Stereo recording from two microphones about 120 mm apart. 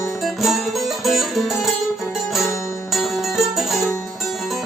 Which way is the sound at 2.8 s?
Centre (ahead or behind).